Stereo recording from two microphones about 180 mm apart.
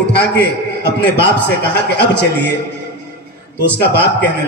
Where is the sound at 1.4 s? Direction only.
70° left (ahead or behind).